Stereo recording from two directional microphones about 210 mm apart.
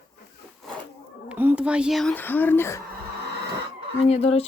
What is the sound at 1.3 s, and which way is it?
Speech, 5° right (ahead or behind).